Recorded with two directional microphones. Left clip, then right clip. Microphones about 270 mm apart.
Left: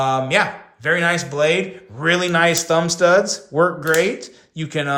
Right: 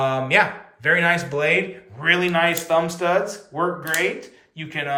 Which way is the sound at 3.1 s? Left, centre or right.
Left.